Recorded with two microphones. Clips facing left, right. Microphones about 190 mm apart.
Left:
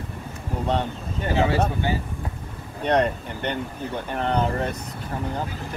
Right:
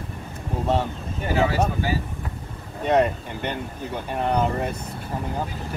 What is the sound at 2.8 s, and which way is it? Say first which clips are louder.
Speech: right 1 dB; 5° right (ahead or behind).